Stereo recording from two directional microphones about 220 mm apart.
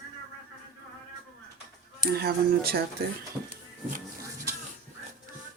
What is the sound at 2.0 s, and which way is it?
Speech, 45° right (ahead or behind).